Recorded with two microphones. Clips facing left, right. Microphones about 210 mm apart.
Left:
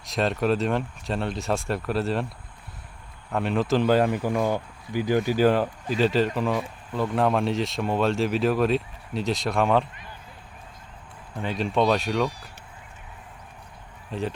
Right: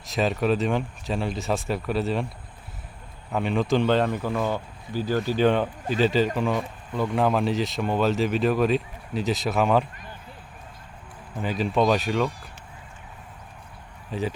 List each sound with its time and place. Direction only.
0.0 s speech: centre (ahead or behind)
3.3 s speech: centre (ahead or behind)
11.3 s speech: 5° right (ahead or behind)
14.1 s speech: centre (ahead or behind)